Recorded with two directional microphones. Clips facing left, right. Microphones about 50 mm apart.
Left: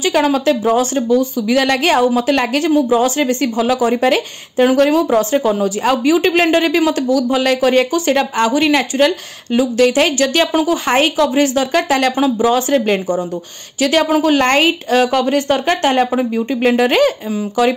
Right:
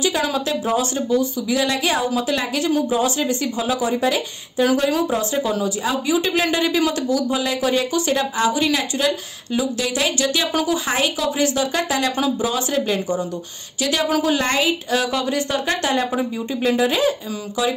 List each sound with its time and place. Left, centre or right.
0.3 s a woman's voice: left
16.6 s a woman's voice: left